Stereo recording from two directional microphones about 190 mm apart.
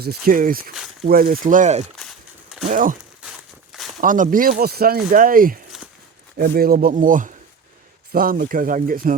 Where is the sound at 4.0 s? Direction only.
45° right (ahead or behind).